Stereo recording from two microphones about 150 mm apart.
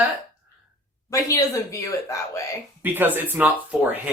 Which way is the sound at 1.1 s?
20° left (ahead or behind).